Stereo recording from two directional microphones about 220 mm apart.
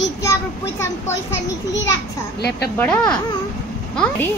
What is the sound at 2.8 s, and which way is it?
Speech, 5° left (ahead or behind).